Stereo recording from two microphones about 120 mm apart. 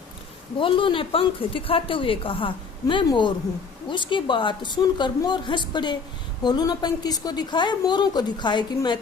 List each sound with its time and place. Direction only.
0.6 s a woman's voice: 45° left (ahead or behind)
2.8 s a woman's voice: 40° left (ahead or behind)